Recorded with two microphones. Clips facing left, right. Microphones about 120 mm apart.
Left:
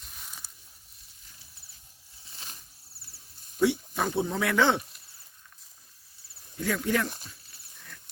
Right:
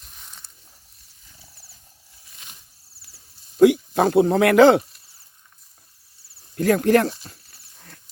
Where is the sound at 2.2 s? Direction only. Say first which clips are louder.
Left 2 dB; 30° left (ahead or behind).